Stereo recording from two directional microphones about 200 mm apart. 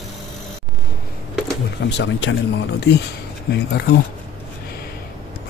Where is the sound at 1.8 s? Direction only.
65° left (ahead or behind).